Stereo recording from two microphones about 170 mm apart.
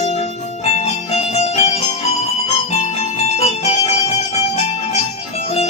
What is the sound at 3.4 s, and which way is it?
Music, 40° left (ahead or behind).